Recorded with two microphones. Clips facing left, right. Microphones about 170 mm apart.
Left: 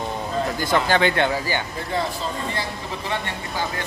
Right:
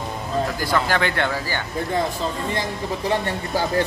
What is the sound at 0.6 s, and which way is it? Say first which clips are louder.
Speech: left 5 dB; 20° left (ahead or behind).